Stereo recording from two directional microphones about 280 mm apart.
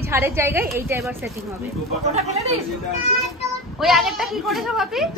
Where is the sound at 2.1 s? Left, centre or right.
Right.